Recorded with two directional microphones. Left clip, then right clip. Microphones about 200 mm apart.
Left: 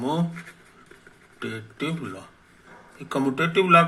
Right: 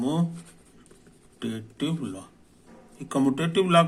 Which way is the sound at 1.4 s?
20° right (ahead or behind).